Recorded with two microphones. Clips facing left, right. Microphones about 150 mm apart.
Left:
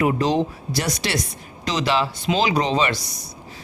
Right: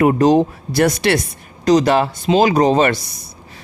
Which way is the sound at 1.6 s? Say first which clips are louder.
Right 9 dB; 45° right (ahead or behind).